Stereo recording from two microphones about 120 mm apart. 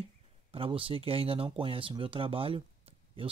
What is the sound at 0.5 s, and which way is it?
Speech, 50° right (ahead or behind).